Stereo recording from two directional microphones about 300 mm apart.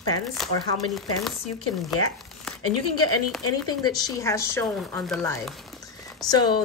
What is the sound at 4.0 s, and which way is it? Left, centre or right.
Speech, centre.